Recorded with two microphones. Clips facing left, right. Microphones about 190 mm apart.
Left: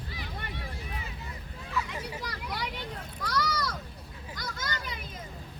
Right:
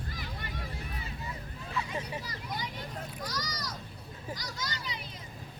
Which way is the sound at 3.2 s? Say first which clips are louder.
Left 11 dB; 60° left (ahead or behind).